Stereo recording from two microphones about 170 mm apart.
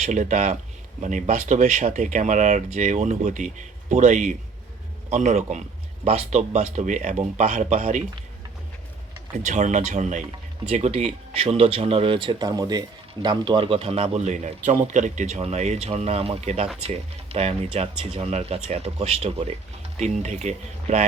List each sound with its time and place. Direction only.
0.0 s speech: 45° right (ahead or behind)
9.3 s speech: 45° right (ahead or behind)